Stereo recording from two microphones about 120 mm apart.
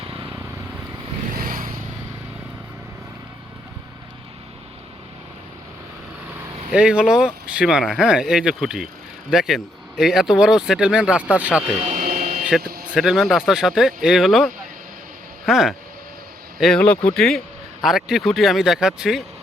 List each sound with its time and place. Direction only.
0.0 s vehicle: 45° right (ahead or behind)
6.7 s speech: 5° right (ahead or behind)
11.9 s a sound: 75° right (ahead or behind)
12.5 s speech: 5° right (ahead or behind)